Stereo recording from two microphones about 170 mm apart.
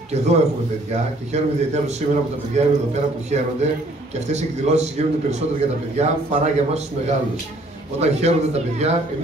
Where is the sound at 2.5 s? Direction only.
40° right (ahead or behind).